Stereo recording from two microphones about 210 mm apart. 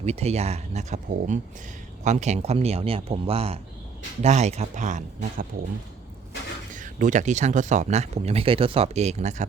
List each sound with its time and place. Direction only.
0.0 s speech: 30° right (ahead or behind)
6.7 s speech: 35° right (ahead or behind)